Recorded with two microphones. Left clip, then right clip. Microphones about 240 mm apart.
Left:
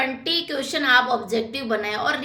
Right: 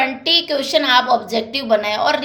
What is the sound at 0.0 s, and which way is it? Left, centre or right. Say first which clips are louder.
A woman's voice: right 7 dB; centre.